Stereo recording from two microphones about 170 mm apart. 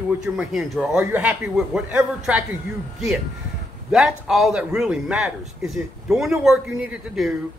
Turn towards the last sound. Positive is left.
turn(degrees=-5)  # may be behind; listen again after turning